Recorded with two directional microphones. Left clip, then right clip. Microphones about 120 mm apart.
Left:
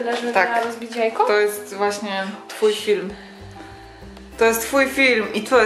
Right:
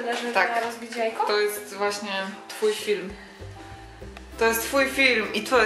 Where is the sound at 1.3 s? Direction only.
Centre (ahead or behind).